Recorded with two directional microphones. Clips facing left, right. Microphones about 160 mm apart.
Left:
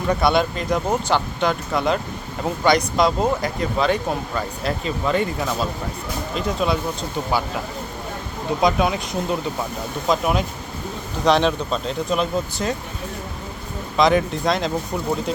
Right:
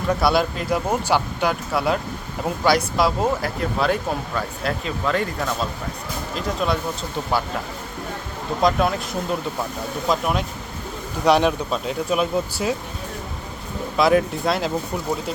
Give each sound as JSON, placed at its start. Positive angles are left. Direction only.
{"t": 0.1, "sound": "speech", "side_deg": 0}
{"t": 8.6, "sound": "speech", "side_deg": 0}
{"t": 11.3, "sound": "speech", "side_deg": -10}
{"t": 13.9, "sound": "speech", "side_deg": -5}